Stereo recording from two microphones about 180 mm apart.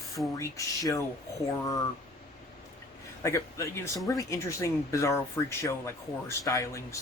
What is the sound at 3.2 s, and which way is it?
Speech, 15° left (ahead or behind).